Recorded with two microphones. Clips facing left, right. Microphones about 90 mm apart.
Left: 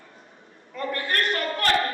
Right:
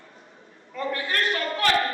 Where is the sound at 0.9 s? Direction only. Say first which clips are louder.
Left 1 dB; 50° left (ahead or behind).